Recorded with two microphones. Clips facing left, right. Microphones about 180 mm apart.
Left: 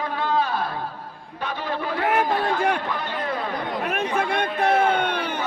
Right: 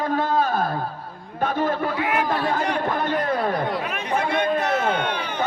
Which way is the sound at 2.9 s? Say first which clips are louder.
Right 5 dB; 45° right (ahead or behind).